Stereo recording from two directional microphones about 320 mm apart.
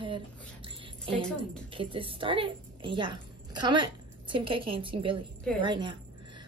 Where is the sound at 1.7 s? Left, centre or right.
Centre.